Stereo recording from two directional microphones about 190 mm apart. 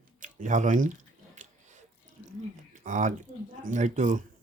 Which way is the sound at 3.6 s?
40° right (ahead or behind).